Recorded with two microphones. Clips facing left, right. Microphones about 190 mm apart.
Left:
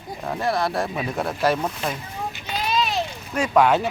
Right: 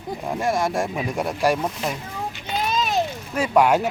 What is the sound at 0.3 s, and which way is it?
Speech, 15° right (ahead or behind).